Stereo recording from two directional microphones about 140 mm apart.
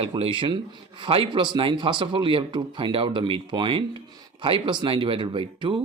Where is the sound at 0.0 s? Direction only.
40° right (ahead or behind).